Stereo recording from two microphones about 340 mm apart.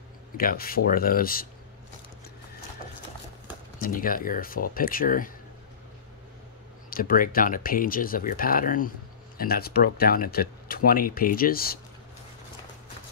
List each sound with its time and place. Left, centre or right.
0.4 s speech: left
3.8 s speech: left
6.9 s speech: left